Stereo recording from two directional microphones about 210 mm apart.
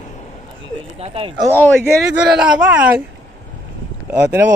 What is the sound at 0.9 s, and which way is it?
Speech, 25° right (ahead or behind).